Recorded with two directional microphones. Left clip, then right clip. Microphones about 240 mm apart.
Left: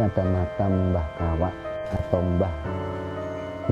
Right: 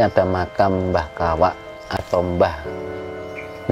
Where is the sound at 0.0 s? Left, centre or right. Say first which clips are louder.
Right 9 dB; right.